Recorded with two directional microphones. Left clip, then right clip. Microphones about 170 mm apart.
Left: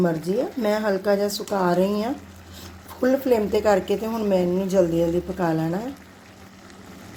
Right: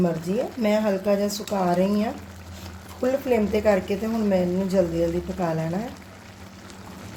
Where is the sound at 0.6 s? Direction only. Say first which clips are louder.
Even; 35° left (ahead or behind).